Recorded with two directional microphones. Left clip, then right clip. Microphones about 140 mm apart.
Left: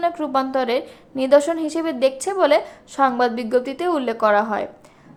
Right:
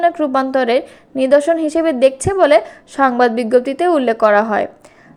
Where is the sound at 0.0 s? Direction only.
25° right (ahead or behind).